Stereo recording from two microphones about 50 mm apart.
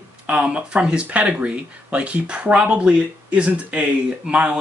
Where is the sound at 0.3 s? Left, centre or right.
Right.